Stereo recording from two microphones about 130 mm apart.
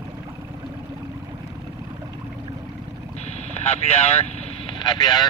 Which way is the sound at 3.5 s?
55° left (ahead or behind).